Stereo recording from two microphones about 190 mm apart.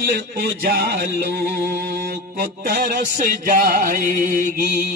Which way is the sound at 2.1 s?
55° right (ahead or behind).